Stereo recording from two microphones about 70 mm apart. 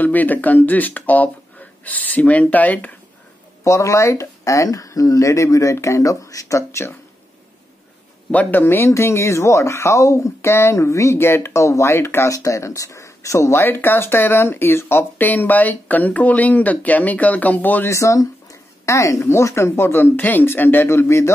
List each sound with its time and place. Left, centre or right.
0.0 s speech: left
3.6 s speech: left
8.3 s speech: left
12.4 s speech: left
17.8 s speech: left